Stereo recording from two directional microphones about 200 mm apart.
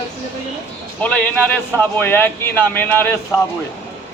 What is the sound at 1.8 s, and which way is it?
Speech, 10° left (ahead or behind).